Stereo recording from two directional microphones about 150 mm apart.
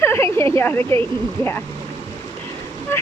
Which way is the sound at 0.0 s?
15° left (ahead or behind).